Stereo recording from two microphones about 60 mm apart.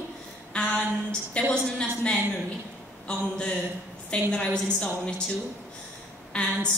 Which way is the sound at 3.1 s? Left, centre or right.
Centre.